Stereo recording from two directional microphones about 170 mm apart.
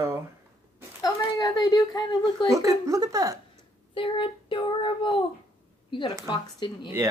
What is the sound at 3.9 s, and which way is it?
Child singing, 30° left (ahead or behind).